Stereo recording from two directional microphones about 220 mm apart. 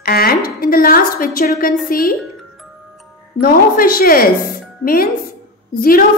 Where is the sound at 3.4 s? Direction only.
40° left (ahead or behind).